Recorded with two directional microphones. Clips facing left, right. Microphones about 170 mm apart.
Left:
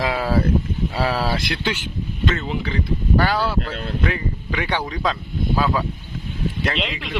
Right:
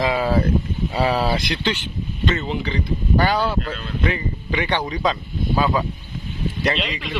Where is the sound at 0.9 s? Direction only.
Centre (ahead or behind).